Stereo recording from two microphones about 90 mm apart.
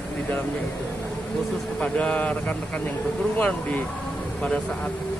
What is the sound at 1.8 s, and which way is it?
Speech, 15° left (ahead or behind).